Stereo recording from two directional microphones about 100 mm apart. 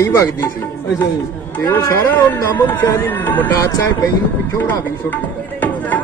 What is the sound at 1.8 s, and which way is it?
Speech, 30° left (ahead or behind).